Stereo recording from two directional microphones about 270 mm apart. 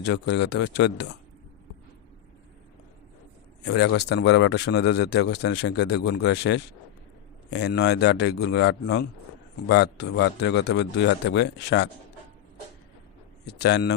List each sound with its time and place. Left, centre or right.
0.0 s a man's voice: left
3.6 s a man's voice: left
13.4 s a man's voice: left